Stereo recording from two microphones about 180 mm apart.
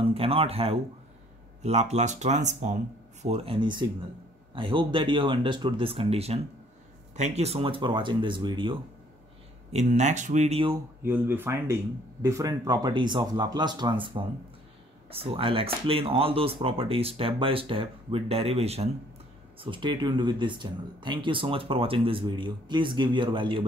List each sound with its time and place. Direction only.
0.1 s speech: 30° right (ahead or behind)
9.7 s speech: 40° right (ahead or behind)
11.0 s speech: 10° right (ahead or behind); by 23.6 s 30° right (ahead or behind)